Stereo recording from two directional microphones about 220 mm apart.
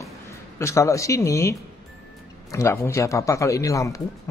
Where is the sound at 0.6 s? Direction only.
15° left (ahead or behind).